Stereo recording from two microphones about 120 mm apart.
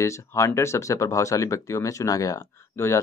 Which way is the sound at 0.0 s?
25° left (ahead or behind).